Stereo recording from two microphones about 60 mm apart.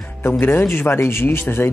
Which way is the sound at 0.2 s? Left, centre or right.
Left.